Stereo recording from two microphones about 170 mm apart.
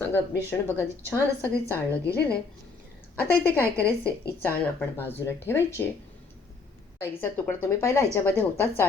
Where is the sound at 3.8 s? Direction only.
15° right (ahead or behind).